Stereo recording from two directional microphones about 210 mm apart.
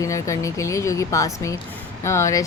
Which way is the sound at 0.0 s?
15° left (ahead or behind).